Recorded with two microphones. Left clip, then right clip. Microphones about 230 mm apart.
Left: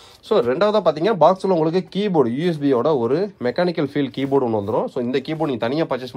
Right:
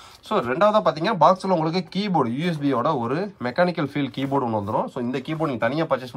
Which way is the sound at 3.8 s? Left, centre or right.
Right.